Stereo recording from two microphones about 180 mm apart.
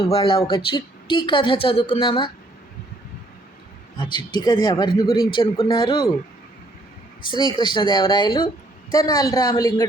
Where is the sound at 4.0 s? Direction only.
25° left (ahead or behind).